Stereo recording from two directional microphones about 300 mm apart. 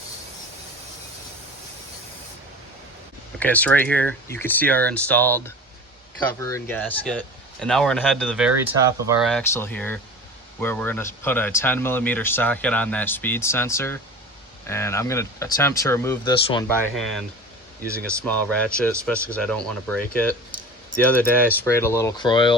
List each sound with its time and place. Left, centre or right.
3.3 s a man's voice: centre